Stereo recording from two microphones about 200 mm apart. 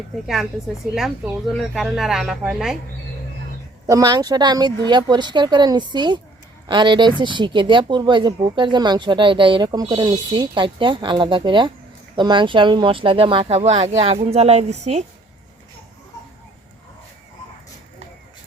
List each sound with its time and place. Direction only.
0.9 s speech: centre (ahead or behind)
3.8 s speech: 20° right (ahead or behind); by 15.0 s 35° right (ahead or behind)